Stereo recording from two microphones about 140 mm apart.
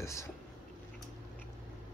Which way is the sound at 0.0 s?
20° left (ahead or behind).